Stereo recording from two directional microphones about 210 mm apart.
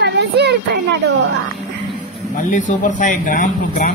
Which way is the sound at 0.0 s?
55° right (ahead or behind).